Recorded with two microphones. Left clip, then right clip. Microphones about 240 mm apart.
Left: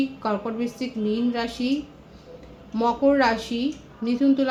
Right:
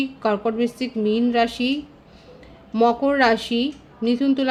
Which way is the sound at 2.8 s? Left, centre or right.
Right.